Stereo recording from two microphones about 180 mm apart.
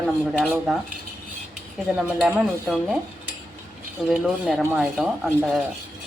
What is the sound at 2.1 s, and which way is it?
Speech, 5° right (ahead or behind).